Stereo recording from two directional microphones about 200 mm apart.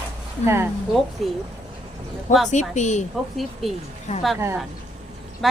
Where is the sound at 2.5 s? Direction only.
35° left (ahead or behind).